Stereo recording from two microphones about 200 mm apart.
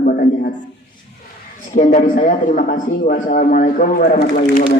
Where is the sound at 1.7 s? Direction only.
40° left (ahead or behind).